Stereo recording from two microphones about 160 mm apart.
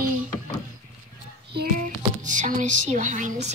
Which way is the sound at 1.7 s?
55° right (ahead or behind).